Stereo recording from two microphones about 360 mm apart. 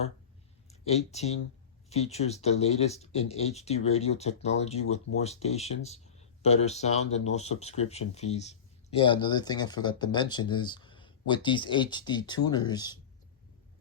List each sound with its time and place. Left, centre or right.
0.7 s speech: centre